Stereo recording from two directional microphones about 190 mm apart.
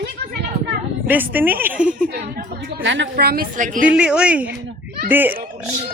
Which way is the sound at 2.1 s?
50° right (ahead or behind).